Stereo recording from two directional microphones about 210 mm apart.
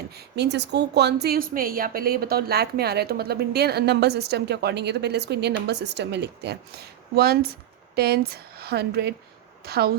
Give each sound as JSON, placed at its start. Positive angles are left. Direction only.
{"t": 0.1, "sound": "a woman's voice", "side_deg": -50}